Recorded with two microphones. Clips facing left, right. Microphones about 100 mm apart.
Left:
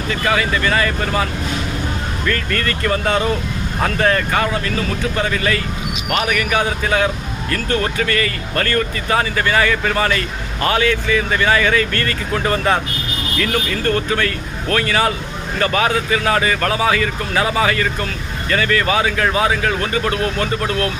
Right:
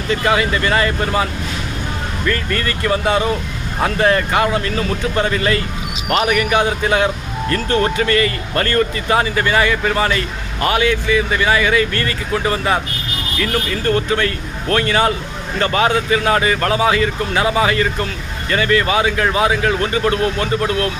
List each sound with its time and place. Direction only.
0.3 s speech: 20° right (ahead or behind)
13.8 s speech: 25° right (ahead or behind)